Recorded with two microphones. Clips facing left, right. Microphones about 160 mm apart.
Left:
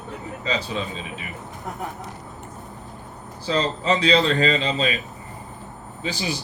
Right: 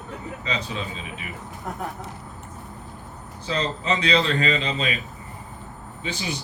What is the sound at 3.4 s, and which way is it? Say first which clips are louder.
A man's voice: left 4 dB; 35° left (ahead or behind).